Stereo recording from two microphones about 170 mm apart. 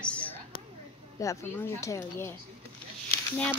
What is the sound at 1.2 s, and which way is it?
Speech, 20° left (ahead or behind).